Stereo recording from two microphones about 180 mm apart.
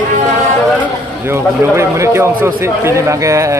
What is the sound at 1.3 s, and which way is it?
Speech, 15° right (ahead or behind).